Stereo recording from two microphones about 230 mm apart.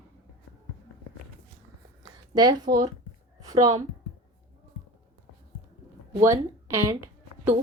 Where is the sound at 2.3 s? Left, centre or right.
Centre.